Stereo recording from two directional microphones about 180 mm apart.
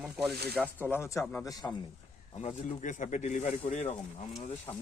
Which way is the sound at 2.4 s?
40° left (ahead or behind).